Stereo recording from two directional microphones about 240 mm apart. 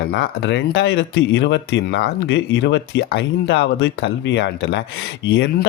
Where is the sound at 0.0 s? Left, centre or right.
Left.